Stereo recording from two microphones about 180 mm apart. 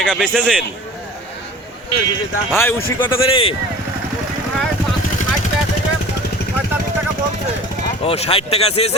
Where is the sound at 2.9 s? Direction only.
15° left (ahead or behind).